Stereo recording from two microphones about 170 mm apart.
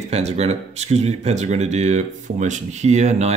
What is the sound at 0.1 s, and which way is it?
Speech, 40° right (ahead or behind).